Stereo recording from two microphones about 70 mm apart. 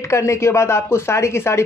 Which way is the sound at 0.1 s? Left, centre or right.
Left.